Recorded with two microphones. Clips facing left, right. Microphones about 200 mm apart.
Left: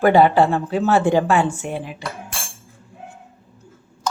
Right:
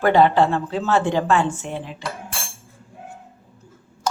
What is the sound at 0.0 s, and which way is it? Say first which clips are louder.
Speech: left 2 dB; 10° left (ahead or behind).